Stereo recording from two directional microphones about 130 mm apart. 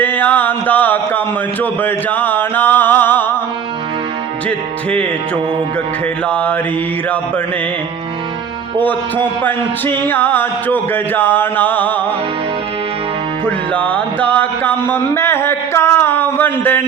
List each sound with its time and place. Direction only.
0.0 s music: 15° left (ahead or behind)
1.8 s a sound: 15° left (ahead or behind)
4.4 s music: 10° left (ahead or behind)
6.2 s music: 10° left (ahead or behind)
9.4 s music: 15° left (ahead or behind)
13.4 s music: 10° left (ahead or behind)